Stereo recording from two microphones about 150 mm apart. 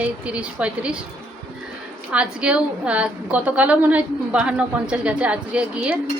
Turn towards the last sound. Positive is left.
turn(degrees=-5)  # may be behind; listen again after turning